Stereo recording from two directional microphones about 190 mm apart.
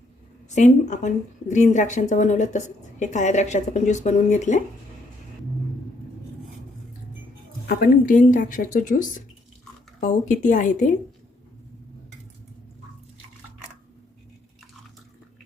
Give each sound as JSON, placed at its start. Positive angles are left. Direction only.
{"t": 0.5, "sound": "speech", "side_deg": 40}
{"t": 7.7, "sound": "speech", "side_deg": 50}